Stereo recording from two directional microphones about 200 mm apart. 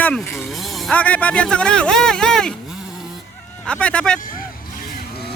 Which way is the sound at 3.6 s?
5° left (ahead or behind).